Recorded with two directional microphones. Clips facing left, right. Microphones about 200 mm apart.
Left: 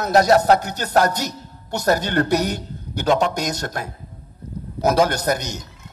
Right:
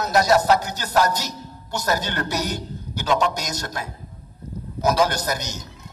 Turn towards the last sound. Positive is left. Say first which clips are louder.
# left 5 dB
turn(degrees=60)  # may be behind; listen again after turning